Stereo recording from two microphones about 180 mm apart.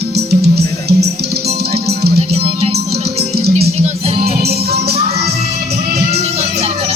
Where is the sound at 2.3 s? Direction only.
35° right (ahead or behind).